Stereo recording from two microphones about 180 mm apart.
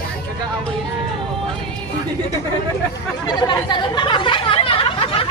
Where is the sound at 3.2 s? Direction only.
25° left (ahead or behind).